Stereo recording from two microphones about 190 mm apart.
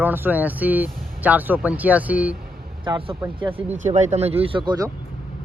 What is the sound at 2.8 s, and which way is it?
Speech, 25° right (ahead or behind).